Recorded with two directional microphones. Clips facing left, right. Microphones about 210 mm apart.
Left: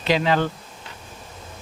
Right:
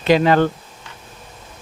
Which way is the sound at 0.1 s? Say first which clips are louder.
Right 6 dB; 50° right (ahead or behind).